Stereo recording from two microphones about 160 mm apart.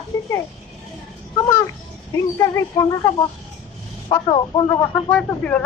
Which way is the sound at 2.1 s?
20° left (ahead or behind).